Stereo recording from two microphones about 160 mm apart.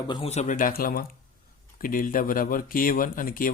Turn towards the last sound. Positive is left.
turn(degrees=65)  # may be behind; listen again after turning